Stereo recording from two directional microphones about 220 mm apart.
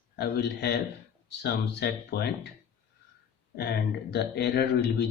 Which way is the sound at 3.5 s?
50° left (ahead or behind).